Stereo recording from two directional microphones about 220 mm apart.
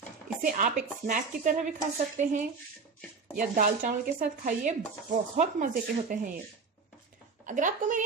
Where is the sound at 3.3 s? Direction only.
40° right (ahead or behind).